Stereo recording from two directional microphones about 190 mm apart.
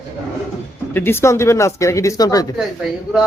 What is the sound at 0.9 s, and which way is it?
Speech, 10° left (ahead or behind).